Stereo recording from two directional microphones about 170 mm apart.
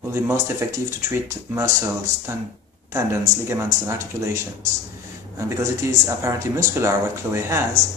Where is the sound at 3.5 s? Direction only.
15° right (ahead or behind).